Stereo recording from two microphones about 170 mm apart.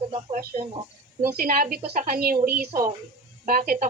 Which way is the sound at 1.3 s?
60° right (ahead or behind).